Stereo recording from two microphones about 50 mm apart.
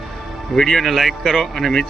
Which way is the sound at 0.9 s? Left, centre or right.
Centre.